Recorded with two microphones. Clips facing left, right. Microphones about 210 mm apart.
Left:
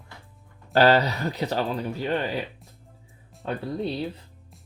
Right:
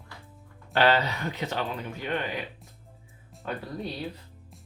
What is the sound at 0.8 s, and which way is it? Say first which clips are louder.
Speech: left 4 dB; 40° left (ahead or behind).